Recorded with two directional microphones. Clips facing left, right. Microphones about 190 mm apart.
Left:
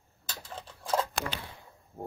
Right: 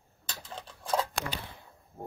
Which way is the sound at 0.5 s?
5° left (ahead or behind).